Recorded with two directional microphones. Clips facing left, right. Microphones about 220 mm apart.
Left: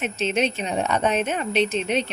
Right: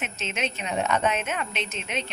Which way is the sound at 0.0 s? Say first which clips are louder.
Left 8 dB; 35° left (ahead or behind).